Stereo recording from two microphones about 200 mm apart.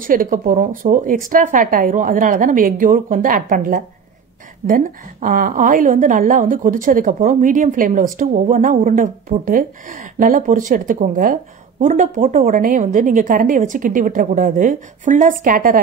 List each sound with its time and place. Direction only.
0.0 s a woman's voice: 45° right (ahead or behind)